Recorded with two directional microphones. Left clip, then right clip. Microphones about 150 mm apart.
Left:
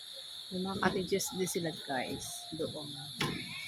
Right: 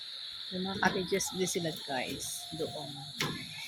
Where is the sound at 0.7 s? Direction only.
10° left (ahead or behind).